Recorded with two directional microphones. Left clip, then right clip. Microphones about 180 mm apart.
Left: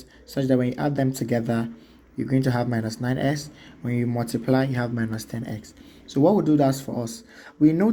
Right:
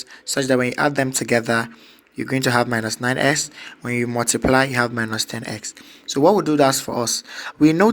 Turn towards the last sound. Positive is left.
turn(degrees=-25)  # may be behind; listen again after turning